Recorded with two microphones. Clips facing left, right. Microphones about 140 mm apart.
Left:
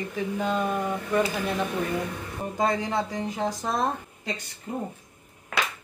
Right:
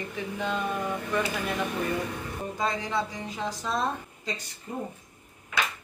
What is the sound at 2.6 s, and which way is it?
A woman's voice, 50° left (ahead or behind).